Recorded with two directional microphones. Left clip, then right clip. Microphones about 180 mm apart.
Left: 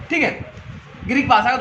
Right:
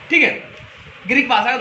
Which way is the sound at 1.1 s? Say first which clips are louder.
Even; 50° left (ahead or behind).